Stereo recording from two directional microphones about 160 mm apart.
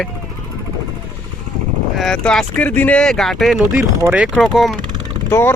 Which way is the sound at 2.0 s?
5° left (ahead or behind).